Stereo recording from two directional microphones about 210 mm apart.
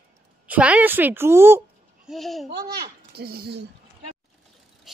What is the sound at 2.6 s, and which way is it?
A child's voice, 50° right (ahead or behind).